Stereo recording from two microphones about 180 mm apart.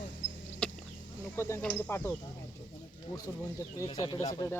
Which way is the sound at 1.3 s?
15° left (ahead or behind).